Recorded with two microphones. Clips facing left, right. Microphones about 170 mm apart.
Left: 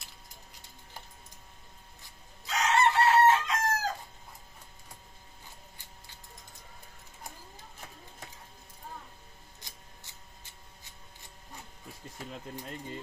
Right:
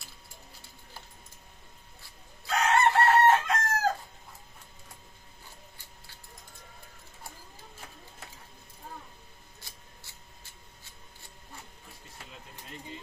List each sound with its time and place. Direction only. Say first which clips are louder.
2.5 s chicken: right 2 dB; 50° right (ahead or behind)
9.6 s scissors: right 1 dB; 20° left (ahead or behind)